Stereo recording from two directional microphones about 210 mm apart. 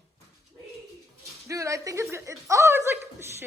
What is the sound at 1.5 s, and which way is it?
A woman's voice, 15° right (ahead or behind).